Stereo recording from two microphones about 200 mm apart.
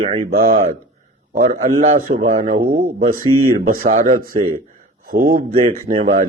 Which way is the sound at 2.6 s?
50° right (ahead or behind).